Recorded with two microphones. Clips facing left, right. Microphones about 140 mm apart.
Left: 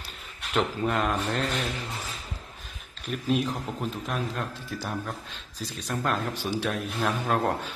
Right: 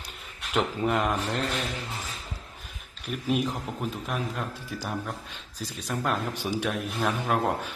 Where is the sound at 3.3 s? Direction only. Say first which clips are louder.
Left 1 dB; 10° right (ahead or behind).